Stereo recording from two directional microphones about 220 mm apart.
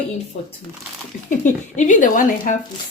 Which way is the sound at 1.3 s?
35° left (ahead or behind).